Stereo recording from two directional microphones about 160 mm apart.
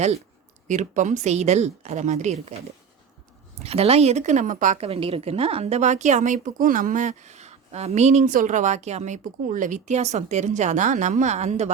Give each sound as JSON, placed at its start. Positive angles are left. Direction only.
{"t": 0.7, "sound": "a woman's voice", "side_deg": -50}
{"t": 3.6, "sound": "a woman's voice", "side_deg": -40}
{"t": 4.8, "sound": "a woman's voice", "side_deg": -35}